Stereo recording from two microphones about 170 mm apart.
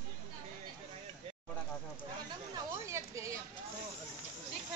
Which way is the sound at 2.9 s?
15° right (ahead or behind).